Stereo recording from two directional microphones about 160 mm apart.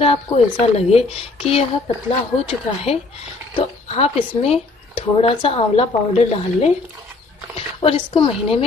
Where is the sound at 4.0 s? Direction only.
40° left (ahead or behind).